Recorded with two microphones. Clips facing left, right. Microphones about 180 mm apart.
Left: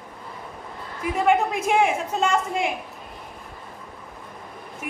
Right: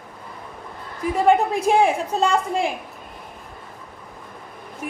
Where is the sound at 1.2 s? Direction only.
35° right (ahead or behind).